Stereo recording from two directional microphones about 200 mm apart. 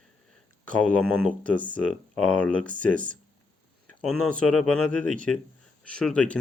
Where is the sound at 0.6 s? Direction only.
5° left (ahead or behind).